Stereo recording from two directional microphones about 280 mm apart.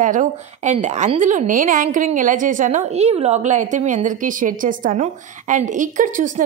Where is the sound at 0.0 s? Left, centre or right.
Right.